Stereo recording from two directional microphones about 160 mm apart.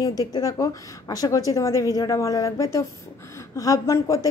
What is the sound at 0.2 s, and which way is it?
A woman's voice, 20° left (ahead or behind).